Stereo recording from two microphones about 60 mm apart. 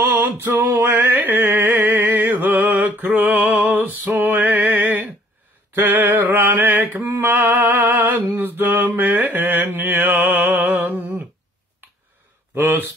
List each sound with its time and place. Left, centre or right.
0.0 s male singing: right
0.6 s a sound: right
3.5 s music: right
5.7 s mantra: right
9.8 s a sound: right
12.5 s speech: right